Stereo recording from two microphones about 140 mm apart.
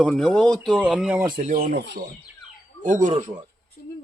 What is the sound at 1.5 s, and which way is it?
Speech, 90° right.